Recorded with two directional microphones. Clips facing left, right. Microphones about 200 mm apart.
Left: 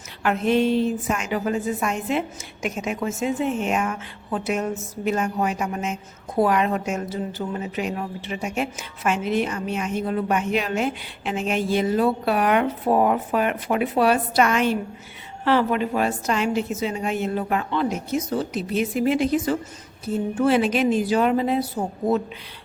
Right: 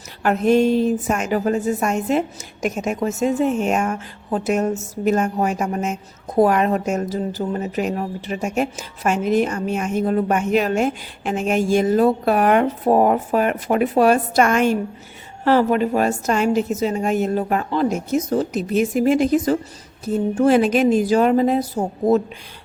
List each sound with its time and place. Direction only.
0.2 s a woman's voice: 45° right (ahead or behind)